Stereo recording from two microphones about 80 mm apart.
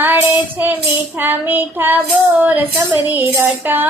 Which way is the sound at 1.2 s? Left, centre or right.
Right.